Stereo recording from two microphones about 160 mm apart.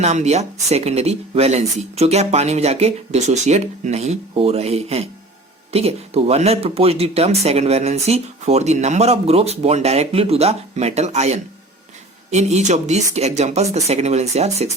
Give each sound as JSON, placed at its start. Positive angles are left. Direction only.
{"t": 0.0, "sound": "speech", "side_deg": -45}